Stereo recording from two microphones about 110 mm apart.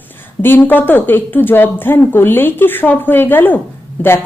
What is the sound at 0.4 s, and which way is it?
A woman's voice, 20° left (ahead or behind).